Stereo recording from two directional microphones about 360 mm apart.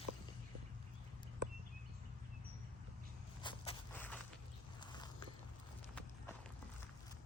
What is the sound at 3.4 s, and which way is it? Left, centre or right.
Walk, centre.